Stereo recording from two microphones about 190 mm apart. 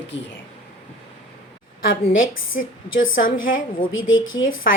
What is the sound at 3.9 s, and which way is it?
Speech, 90° left.